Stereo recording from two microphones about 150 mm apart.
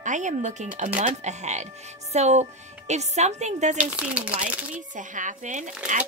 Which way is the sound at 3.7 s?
10° right (ahead or behind).